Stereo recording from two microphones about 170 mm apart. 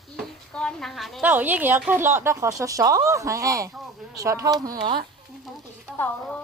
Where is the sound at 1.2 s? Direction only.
10° right (ahead or behind).